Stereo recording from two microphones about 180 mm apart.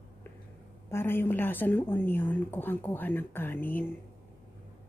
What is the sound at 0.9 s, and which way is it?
A woman's voice, 10° left (ahead or behind).